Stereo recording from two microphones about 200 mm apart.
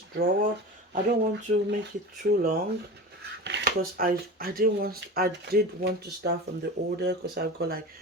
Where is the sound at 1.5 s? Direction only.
45° right (ahead or behind).